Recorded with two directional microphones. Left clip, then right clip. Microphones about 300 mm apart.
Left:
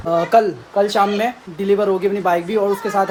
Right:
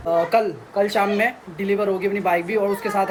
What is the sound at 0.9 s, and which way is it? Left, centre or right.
A woman's voice, centre.